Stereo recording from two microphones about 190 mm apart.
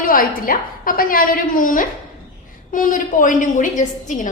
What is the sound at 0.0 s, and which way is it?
A woman's voice, 50° left (ahead or behind).